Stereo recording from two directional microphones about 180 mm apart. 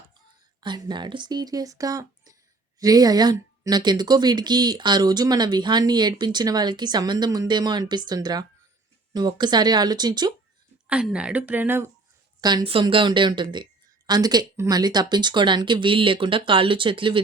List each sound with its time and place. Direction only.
0.6 s speech: 25° right (ahead or behind)
10.8 s speech: 5° right (ahead or behind)
12.4 s speech: 25° right (ahead or behind)